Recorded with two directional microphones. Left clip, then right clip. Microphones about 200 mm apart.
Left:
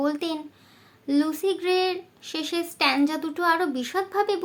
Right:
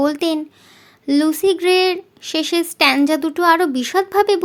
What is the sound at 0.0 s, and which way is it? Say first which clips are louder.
Speech: right 9 dB; 45° right (ahead or behind).